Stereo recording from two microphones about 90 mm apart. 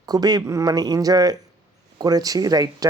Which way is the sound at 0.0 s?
45° right (ahead or behind).